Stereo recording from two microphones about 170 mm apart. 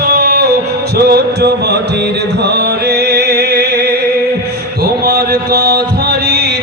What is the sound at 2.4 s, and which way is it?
Music, 75° right (ahead or behind).